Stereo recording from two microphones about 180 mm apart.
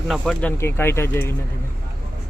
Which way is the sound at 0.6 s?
15° left (ahead or behind).